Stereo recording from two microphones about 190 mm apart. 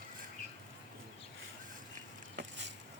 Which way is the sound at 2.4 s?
70° right (ahead or behind).